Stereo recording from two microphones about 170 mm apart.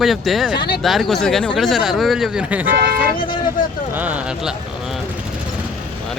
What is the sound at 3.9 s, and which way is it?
Speech, 10° right (ahead or behind).